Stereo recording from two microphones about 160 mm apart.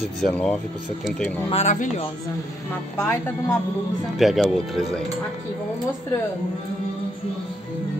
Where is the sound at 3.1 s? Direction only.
15° left (ahead or behind).